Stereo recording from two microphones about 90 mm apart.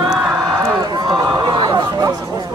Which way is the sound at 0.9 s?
50° right (ahead or behind).